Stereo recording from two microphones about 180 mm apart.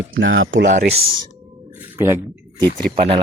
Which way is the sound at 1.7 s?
10° right (ahead or behind).